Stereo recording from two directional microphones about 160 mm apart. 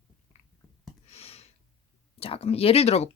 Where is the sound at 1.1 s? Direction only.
40° left (ahead or behind).